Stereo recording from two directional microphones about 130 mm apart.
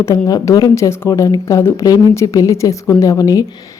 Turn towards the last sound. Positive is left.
turn(degrees=25)  # may be behind; listen again after turning